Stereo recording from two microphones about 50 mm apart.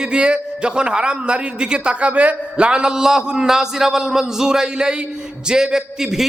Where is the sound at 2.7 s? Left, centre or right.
Centre.